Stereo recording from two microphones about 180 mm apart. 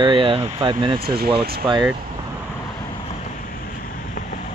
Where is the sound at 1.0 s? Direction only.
60° right (ahead or behind).